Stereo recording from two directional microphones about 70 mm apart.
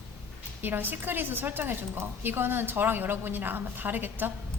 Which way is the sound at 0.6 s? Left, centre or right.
Right.